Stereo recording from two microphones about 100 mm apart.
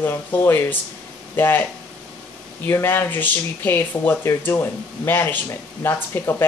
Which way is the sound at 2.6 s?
20° left (ahead or behind).